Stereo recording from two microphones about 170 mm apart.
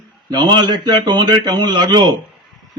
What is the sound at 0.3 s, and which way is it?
A man's voice, 25° right (ahead or behind).